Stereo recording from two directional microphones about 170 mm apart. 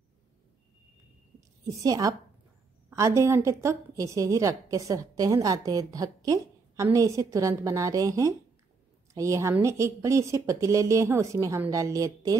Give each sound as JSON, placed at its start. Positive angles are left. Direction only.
{"t": 1.6, "sound": "a woman's voice", "side_deg": -20}